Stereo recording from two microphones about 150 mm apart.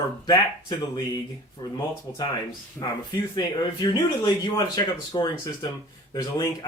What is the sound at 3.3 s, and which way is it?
Speech, 30° left (ahead or behind).